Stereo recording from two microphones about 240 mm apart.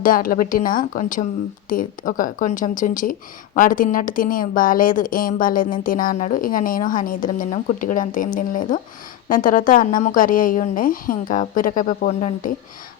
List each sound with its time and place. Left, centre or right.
0.0 s a woman's voice: left